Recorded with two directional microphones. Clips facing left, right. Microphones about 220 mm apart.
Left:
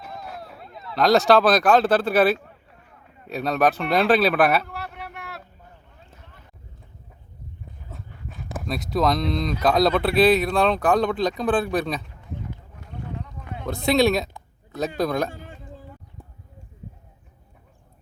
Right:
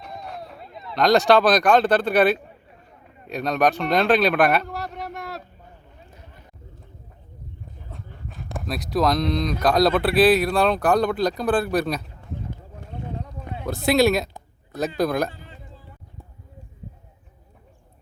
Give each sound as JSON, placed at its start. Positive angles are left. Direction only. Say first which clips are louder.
{"t": 0.0, "sound": "a sound", "louder": "right 1 dB", "side_deg": 5}
{"t": 3.2, "sound": "speech", "louder": "even", "side_deg": 5}
{"t": 4.6, "sound": "a sound", "louder": "right 4 dB", "side_deg": -40}
{"t": 7.9, "sound": "speech", "louder": "even", "side_deg": 0}
{"t": 13.7, "sound": "speech", "louder": "right 1 dB", "side_deg": -5}
{"t": 15.3, "sound": "a man's voice", "louder": "left 4 dB", "side_deg": 45}